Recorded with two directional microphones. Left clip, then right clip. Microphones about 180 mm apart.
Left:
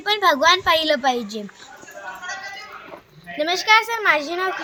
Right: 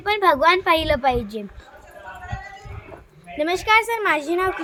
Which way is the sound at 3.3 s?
50° right (ahead or behind).